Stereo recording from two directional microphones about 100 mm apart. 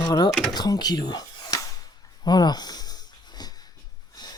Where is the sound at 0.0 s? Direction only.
45° left (ahead or behind).